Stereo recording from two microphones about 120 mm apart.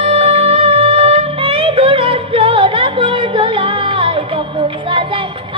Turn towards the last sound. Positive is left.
turn(degrees=-45)  # may be behind; listen again after turning